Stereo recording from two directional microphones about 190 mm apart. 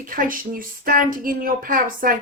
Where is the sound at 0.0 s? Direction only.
45° right (ahead or behind).